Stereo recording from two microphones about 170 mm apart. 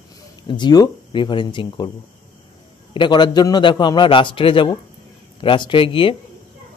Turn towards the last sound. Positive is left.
turn(degrees=30)  # may be behind; listen again after turning